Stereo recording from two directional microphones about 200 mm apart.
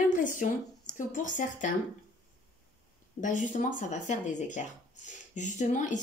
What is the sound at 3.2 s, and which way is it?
Speech, 40° left (ahead or behind).